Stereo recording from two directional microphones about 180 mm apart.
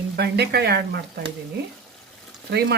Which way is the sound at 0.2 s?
65° right (ahead or behind).